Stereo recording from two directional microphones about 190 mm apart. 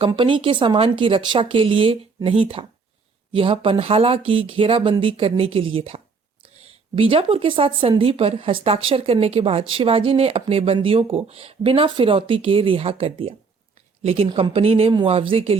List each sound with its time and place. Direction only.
0.1 s a woman's voice: 25° right (ahead or behind)